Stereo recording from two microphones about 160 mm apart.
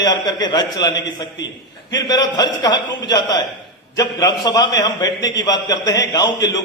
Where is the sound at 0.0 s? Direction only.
25° left (ahead or behind).